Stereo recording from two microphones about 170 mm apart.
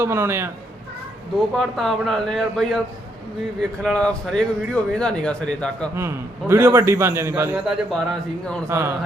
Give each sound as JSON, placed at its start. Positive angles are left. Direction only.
{"t": 0.0, "sound": "a man's voice", "side_deg": -15}
{"t": 1.5, "sound": "speech", "side_deg": 0}
{"t": 6.0, "sound": "a man's voice", "side_deg": -15}
{"t": 8.6, "sound": "a man's voice", "side_deg": -15}